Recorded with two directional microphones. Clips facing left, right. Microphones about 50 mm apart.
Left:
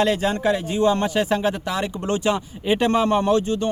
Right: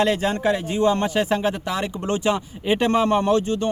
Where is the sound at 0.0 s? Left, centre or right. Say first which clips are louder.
Even; right.